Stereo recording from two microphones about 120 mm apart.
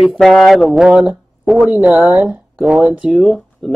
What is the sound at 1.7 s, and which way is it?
Speech, 15° right (ahead or behind).